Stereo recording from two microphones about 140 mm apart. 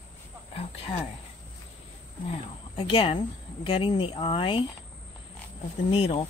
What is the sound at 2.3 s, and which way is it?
Speech, 40° left (ahead or behind).